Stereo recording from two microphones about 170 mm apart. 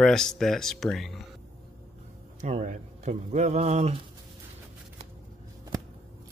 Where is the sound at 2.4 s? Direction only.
45° right (ahead or behind).